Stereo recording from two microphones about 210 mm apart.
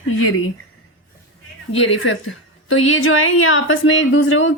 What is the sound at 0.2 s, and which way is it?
Speech, 80° left.